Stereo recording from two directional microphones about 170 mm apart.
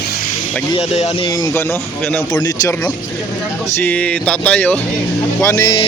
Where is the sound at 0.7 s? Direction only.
35° left (ahead or behind).